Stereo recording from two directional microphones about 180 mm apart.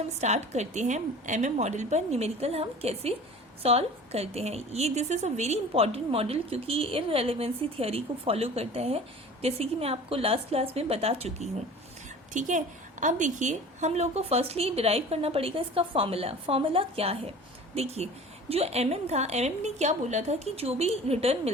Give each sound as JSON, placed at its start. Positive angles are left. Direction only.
{"t": 0.2, "sound": "a woman's voice", "side_deg": -40}
{"t": 12.3, "sound": "a woman's voice", "side_deg": -45}